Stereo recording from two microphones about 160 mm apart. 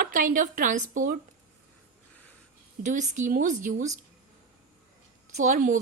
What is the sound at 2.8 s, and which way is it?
A woman's voice, 50° right (ahead or behind).